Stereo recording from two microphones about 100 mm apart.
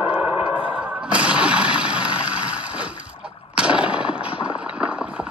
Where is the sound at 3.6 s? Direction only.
10° right (ahead or behind).